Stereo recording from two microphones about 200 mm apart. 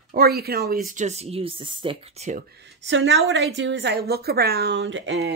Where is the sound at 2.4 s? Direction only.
60° right (ahead or behind).